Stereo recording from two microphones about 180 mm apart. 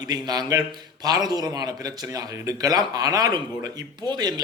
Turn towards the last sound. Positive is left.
turn(degrees=-25)  # may be behind; listen again after turning